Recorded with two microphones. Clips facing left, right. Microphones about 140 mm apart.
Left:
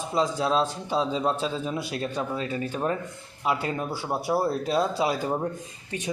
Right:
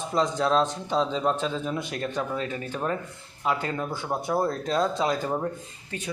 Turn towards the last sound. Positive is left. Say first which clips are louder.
# left 2 dB
turn(degrees=15)  # may be behind; listen again after turning